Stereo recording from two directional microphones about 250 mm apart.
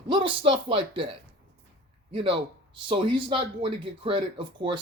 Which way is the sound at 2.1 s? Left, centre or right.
Right.